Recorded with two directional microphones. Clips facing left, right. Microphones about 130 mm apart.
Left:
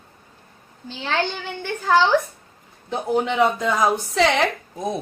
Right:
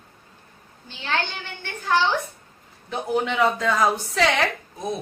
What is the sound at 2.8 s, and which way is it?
A woman's voice, 25° left (ahead or behind).